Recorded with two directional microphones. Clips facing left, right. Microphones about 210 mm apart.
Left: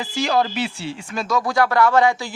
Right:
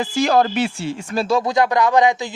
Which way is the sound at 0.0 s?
50° right (ahead or behind).